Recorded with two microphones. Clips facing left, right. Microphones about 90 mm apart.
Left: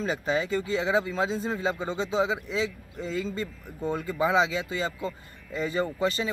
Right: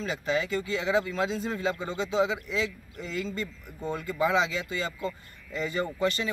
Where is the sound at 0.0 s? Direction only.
30° left (ahead or behind).